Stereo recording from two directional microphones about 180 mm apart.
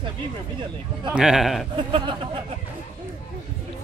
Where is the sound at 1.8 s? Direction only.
30° right (ahead or behind).